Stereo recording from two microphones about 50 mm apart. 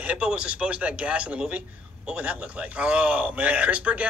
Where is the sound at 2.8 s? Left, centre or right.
Right.